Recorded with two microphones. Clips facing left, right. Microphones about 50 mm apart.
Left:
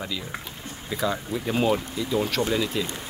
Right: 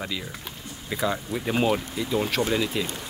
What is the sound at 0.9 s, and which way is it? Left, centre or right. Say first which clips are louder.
Speech: even; centre.